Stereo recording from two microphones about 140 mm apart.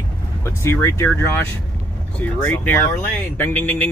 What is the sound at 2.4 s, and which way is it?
Speech, 15° left (ahead or behind).